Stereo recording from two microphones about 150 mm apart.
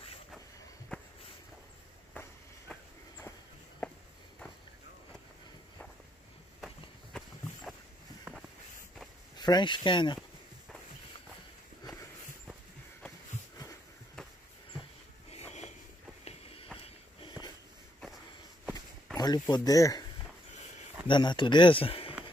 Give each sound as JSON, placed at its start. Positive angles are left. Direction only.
{"t": 3.8, "sound": "walk", "side_deg": 10}
{"t": 8.3, "sound": "a sound", "side_deg": -15}
{"t": 9.4, "sound": "speech", "side_deg": 30}
{"t": 11.8, "sound": "a sound", "side_deg": 20}
{"t": 15.3, "sound": "sniff", "side_deg": 45}
{"t": 16.3, "sound": "walk", "side_deg": 40}
{"t": 16.8, "sound": "a sound", "side_deg": 30}
{"t": 19.1, "sound": "a man's voice", "side_deg": 25}
{"t": 21.1, "sound": "speech", "side_deg": 30}